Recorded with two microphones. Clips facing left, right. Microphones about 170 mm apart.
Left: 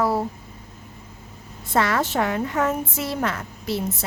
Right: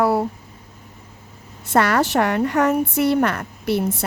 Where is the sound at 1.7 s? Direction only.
70° right (ahead or behind).